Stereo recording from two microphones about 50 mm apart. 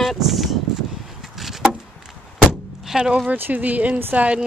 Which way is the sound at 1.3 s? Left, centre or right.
Centre.